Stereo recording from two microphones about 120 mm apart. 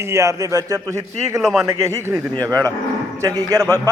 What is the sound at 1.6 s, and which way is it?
A man's voice, 25° right (ahead or behind).